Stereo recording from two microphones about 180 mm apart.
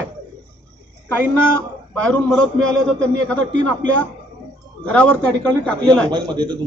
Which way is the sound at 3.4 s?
90° right.